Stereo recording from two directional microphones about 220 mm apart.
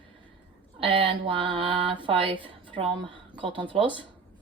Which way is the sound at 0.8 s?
25° right (ahead or behind).